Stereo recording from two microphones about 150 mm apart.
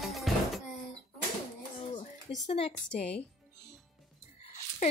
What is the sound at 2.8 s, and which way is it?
Speech, 10° left (ahead or behind).